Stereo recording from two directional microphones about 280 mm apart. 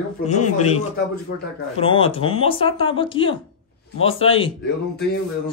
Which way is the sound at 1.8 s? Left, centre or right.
Centre.